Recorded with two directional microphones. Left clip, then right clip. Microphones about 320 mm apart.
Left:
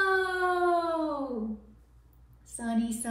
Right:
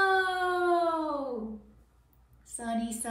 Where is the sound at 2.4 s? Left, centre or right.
Centre.